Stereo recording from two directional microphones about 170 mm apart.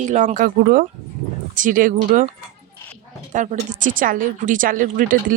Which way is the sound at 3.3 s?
50° right (ahead or behind).